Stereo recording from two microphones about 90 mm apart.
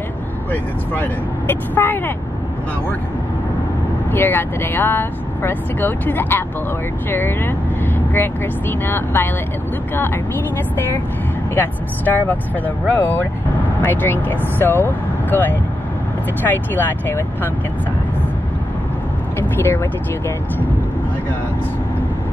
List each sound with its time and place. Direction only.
1.5 s speech: 25° left (ahead or behind)
4.1 s speech: 25° left (ahead or behind)
11.5 s speech: 20° left (ahead or behind)
19.6 s speech: 25° left (ahead or behind)